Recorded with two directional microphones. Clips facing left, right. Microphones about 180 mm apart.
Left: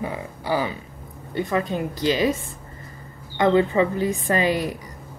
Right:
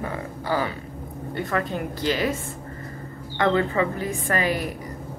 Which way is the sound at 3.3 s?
20° left (ahead or behind).